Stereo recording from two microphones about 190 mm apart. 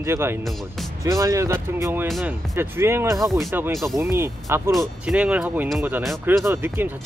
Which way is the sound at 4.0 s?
15° right (ahead or behind).